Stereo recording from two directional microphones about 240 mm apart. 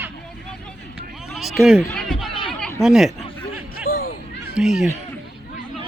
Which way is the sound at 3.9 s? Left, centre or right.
Left.